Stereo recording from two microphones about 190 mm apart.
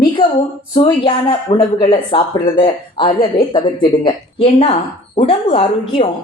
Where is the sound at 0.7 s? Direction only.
25° left (ahead or behind).